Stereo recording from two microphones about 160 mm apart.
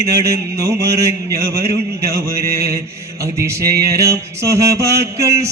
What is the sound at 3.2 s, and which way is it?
Mantra, 20° right (ahead or behind).